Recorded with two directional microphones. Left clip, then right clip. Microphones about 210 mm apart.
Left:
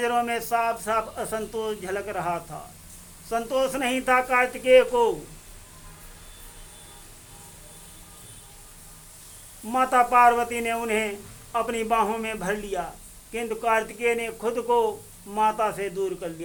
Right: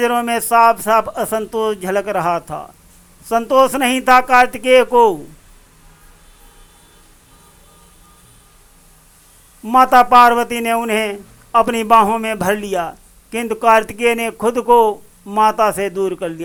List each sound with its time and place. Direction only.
0.0 s speech: 25° right (ahead or behind)
9.6 s speech: 25° right (ahead or behind)